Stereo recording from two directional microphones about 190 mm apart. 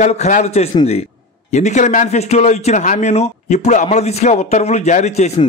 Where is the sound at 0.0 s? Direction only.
35° left (ahead or behind).